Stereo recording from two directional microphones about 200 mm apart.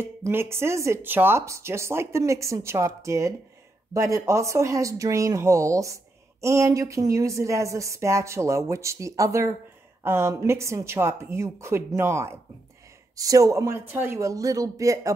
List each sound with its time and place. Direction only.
0.0 s speech: 10° right (ahead or behind)